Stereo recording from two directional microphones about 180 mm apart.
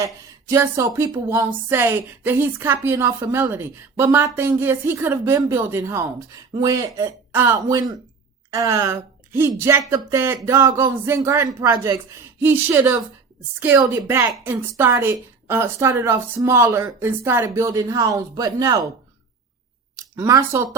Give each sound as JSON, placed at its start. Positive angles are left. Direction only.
{"t": 0.0, "sound": "a woman's voice", "side_deg": -15}
{"t": 20.0, "sound": "speech", "side_deg": -15}